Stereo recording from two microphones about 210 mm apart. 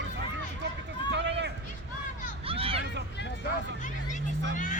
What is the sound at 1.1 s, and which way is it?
Run, 55° right (ahead or behind).